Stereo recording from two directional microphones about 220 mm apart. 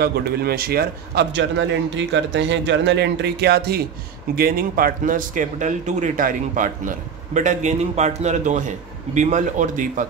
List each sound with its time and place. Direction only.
0.0 s speech: 45° right (ahead or behind)